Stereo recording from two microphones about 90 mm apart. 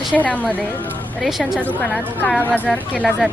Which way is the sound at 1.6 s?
20° left (ahead or behind).